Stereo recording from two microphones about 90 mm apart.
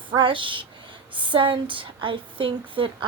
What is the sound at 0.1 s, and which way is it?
Speech, 65° right (ahead or behind).